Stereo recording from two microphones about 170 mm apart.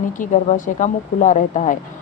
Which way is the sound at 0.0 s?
50° left (ahead or behind).